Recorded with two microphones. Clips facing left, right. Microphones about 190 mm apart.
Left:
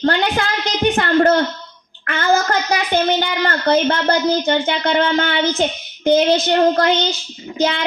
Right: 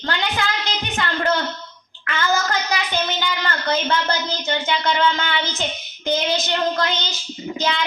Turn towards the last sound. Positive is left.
turn(degrees=55)  # may be behind; listen again after turning